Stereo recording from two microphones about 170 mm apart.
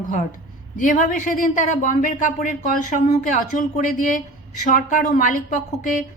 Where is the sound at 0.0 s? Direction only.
50° left (ahead or behind).